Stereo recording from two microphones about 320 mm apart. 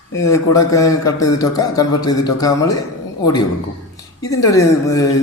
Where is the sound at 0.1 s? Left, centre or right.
Centre.